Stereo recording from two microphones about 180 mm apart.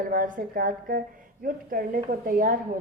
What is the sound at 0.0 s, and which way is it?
A woman's voice, 50° right (ahead or behind).